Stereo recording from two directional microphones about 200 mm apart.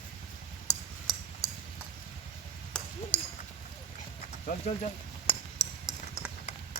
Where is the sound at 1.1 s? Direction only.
Centre (ahead or behind).